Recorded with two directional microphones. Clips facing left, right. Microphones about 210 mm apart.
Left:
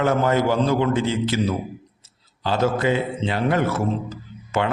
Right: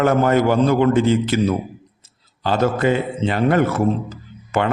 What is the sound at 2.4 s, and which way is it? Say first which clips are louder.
A man's voice: right 3 dB; 50° right (ahead or behind).